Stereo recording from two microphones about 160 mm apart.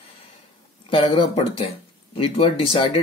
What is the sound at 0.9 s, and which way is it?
Speech, 35° left (ahead or behind).